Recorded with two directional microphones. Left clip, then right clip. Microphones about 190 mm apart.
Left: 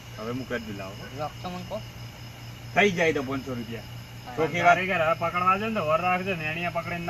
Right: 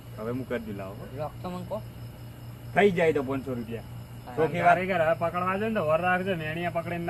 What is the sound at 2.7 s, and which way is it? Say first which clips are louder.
Speech: even; 15° right (ahead or behind).